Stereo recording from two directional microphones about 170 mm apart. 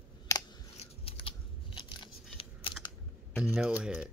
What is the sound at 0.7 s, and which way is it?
Biting, 35° left (ahead or behind).